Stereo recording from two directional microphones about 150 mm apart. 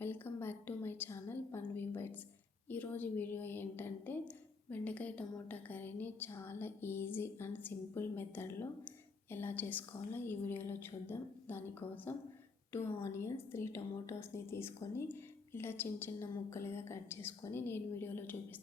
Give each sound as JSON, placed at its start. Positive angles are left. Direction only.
{"t": 0.0, "sound": "a woman's voice", "side_deg": 15}